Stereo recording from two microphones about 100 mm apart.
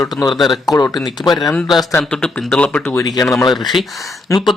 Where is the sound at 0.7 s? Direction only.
35° left (ahead or behind).